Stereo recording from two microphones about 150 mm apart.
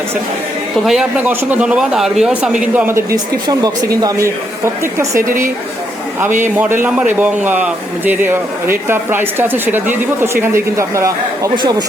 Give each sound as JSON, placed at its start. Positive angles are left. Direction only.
{"t": 0.9, "sound": "a man's voice", "side_deg": -5}
{"t": 6.4, "sound": "a man's voice", "side_deg": -15}